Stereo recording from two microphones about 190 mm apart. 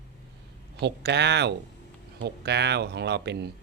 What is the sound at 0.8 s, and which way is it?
A man's voice, 60° right (ahead or behind).